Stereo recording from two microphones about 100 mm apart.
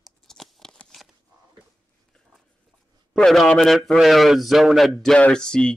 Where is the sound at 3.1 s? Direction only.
Centre (ahead or behind).